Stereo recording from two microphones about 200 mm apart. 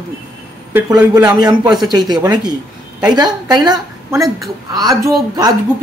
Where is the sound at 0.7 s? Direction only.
10° right (ahead or behind).